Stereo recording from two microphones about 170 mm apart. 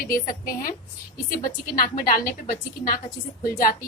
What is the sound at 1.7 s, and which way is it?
A woman's voice, 60° left (ahead or behind).